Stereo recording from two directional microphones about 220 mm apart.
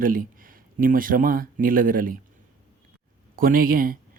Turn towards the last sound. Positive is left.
turn(degrees=-40)  # may be behind; listen again after turning